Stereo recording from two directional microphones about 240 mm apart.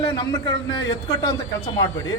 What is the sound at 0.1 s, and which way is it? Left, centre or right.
A man's voice, centre.